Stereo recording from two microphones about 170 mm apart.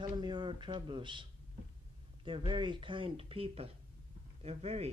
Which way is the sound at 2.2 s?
30° right (ahead or behind).